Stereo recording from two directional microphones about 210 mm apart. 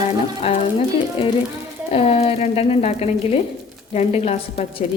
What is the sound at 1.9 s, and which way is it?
Speech, 30° left (ahead or behind).